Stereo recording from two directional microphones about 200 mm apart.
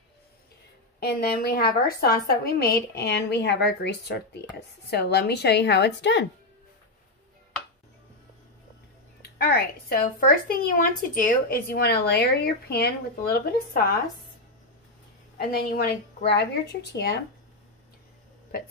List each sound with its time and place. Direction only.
0.9 s speech: 50° left (ahead or behind)
9.2 s speech: 50° left (ahead or behind)
15.3 s speech: 50° left (ahead or behind)